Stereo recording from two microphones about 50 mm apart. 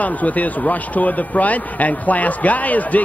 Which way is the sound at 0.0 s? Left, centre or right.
Left.